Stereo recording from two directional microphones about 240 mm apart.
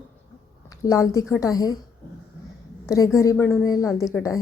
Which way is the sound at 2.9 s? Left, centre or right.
Centre.